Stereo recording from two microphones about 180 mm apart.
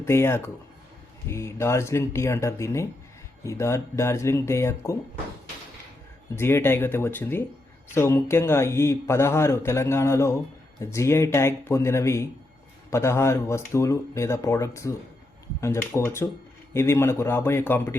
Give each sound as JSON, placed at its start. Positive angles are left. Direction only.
{"t": 0.0, "sound": "speech", "side_deg": 15}
{"t": 6.3, "sound": "speech", "side_deg": 15}